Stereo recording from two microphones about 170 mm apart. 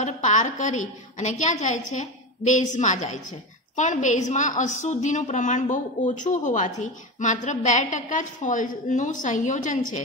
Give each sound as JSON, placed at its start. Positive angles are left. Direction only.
{"t": 0.0, "sound": "a woman's voice", "side_deg": 45}